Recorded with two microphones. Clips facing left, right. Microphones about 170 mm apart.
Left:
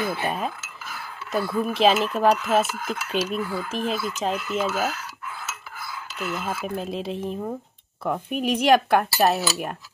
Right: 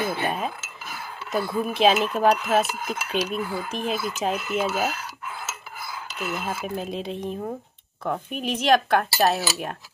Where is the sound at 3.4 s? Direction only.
20° right (ahead or behind).